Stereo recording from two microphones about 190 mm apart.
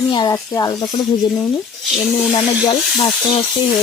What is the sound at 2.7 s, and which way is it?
Speech, 30° left (ahead or behind).